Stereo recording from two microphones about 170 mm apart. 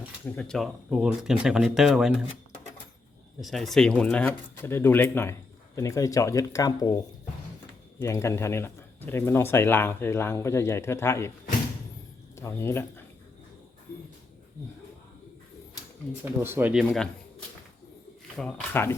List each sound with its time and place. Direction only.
0.3 s speech: 5° left (ahead or behind)
3.4 s speech: centre (ahead or behind)
12.4 s speech: 15° left (ahead or behind)
16.2 s speech: 15° right (ahead or behind)
18.3 s speech: 5° left (ahead or behind)